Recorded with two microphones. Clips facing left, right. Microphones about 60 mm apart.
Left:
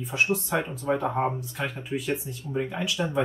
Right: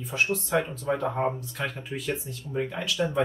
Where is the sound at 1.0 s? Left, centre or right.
Centre.